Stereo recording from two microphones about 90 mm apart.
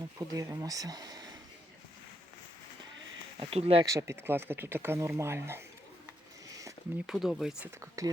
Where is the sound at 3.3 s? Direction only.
90° right.